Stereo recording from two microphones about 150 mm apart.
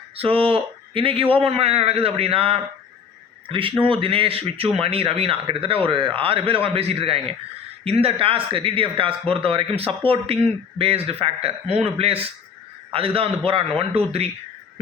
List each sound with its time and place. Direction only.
0.2 s a man's voice: 40° right (ahead or behind)